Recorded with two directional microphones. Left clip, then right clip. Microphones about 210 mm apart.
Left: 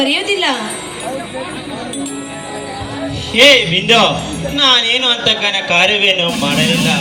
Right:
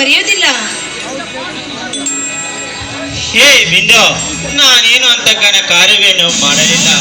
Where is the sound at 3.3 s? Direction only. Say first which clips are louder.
Right 3 dB; 60° left (ahead or behind).